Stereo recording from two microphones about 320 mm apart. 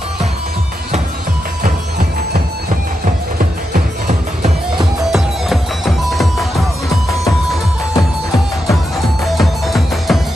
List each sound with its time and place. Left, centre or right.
3.7 s music: right
5.1 s music: centre
8.6 s music: centre